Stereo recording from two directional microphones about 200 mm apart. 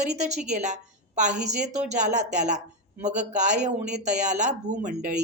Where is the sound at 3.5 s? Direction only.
5° right (ahead or behind).